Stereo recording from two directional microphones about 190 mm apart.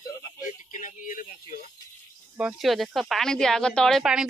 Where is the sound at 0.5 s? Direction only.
45° left (ahead or behind).